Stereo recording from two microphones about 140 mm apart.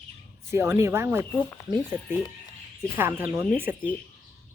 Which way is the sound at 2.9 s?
15° right (ahead or behind).